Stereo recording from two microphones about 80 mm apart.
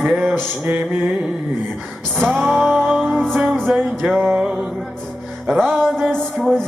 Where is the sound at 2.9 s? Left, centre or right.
Centre.